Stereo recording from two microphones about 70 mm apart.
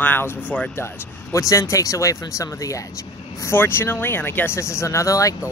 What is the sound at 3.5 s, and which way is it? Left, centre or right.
Speech, left.